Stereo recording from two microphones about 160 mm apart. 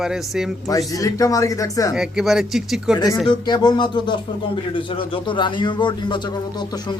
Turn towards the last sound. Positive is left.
turn(degrees=25)  # may be behind; listen again after turning